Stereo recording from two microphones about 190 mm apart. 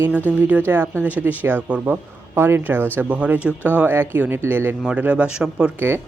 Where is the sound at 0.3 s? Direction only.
10° right (ahead or behind).